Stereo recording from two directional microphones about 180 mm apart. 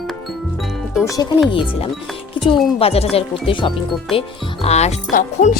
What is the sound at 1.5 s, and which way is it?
A woman's voice, 30° left (ahead or behind).